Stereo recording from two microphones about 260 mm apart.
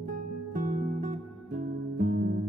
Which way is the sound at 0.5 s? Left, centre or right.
Right.